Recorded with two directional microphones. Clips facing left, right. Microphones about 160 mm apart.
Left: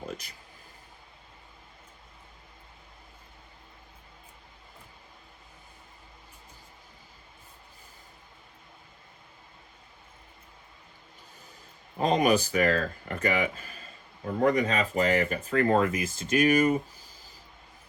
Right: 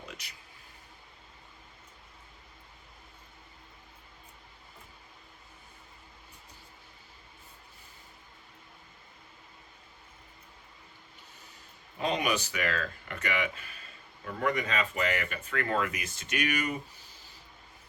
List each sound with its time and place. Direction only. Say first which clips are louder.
0.2 s speech: left 1 dB; 45° left (ahead or behind)
11.9 s speech: left 7 dB; 40° left (ahead or behind)